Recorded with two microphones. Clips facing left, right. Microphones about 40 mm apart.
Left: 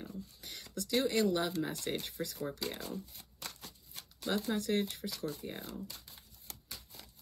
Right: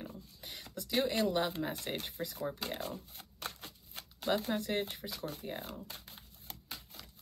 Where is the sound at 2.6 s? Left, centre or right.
Right.